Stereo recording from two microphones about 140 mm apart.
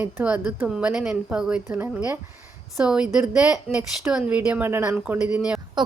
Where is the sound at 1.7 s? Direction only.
15° right (ahead or behind).